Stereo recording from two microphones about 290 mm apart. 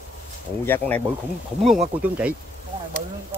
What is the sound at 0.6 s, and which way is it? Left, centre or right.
Speech, centre.